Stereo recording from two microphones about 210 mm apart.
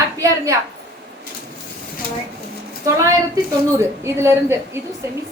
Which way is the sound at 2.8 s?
15° right (ahead or behind).